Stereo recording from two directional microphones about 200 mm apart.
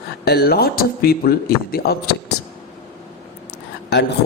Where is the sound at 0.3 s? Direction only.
50° left (ahead or behind).